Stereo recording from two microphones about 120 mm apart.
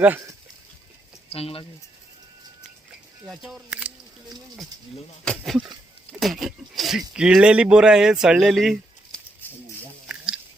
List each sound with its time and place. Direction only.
1.3 s speech: 55° left (ahead or behind)
3.2 s speech: 5° right (ahead or behind)
5.2 s speech: 5° left (ahead or behind)
10.1 s chewing: 10° right (ahead or behind)